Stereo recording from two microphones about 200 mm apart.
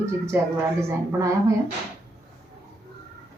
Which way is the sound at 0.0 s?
15° right (ahead or behind).